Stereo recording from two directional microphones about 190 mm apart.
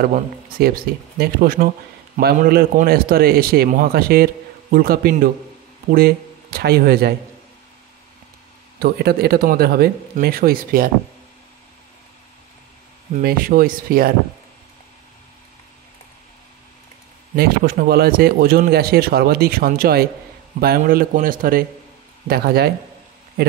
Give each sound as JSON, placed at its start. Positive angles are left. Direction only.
{"t": 0.0, "sound": "a man's voice", "side_deg": -50}
{"t": 8.7, "sound": "a man's voice", "side_deg": -55}
{"t": 13.2, "sound": "a man's voice", "side_deg": -50}
{"t": 17.4, "sound": "a man's voice", "side_deg": -55}